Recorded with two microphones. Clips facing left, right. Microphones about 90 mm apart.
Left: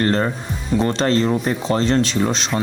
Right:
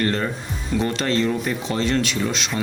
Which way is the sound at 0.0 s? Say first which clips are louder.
Left 4 dB; 35° left (ahead or behind).